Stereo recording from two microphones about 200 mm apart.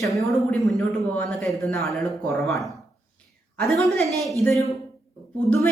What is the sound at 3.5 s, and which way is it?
Speech, centre (ahead or behind).